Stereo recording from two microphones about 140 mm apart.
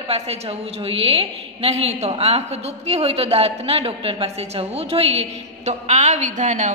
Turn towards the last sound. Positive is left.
turn(degrees=-60)  # may be behind; listen again after turning